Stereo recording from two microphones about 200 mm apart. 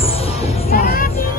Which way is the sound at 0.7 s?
50° left (ahead or behind).